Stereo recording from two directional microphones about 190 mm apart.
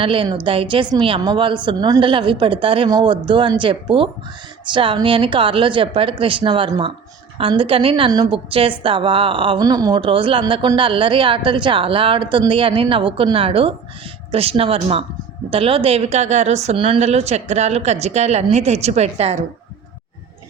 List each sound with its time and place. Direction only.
0.0 s a woman's voice: 25° right (ahead or behind)